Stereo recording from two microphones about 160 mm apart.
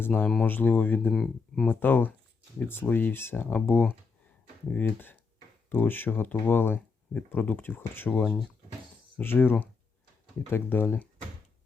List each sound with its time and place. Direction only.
0.0 s speech: 10° left (ahead or behind)
1.1 s speech: centre (ahead or behind)
1.6 s speech: 10° left (ahead or behind)